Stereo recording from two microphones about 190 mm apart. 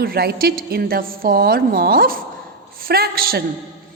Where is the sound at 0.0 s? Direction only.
55° right (ahead or behind).